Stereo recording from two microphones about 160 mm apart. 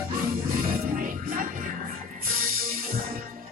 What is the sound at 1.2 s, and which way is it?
Music, 60° right (ahead or behind).